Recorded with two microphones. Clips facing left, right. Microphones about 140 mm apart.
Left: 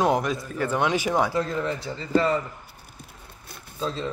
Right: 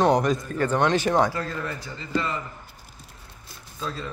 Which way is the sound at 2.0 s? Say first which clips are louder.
Left 6 dB; 35° left (ahead or behind).